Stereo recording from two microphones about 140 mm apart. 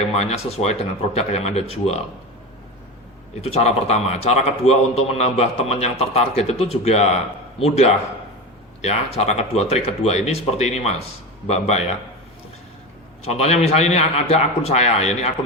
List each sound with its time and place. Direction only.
0.1 s a man's voice: 50° left (ahead or behind)
3.4 s a man's voice: 50° left (ahead or behind)
13.2 s a man's voice: 45° left (ahead or behind)